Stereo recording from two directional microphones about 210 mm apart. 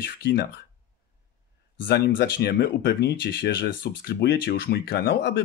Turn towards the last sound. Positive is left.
turn(degrees=50)  # may be behind; listen again after turning